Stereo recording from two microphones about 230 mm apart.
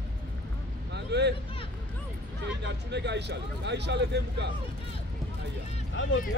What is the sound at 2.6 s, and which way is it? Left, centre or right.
Speech, right.